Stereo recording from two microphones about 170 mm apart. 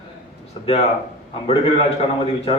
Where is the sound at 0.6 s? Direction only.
35° left (ahead or behind).